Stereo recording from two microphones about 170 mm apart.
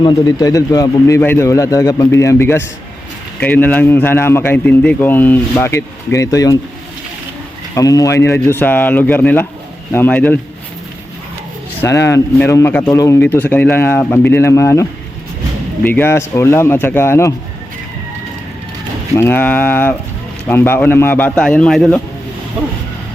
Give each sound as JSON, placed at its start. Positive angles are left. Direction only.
{"t": 0.0, "sound": "a man's voice", "side_deg": 25}
{"t": 7.8, "sound": "a man's voice", "side_deg": 20}
{"t": 11.8, "sound": "a man's voice", "side_deg": 15}
{"t": 19.1, "sound": "a man's voice", "side_deg": 15}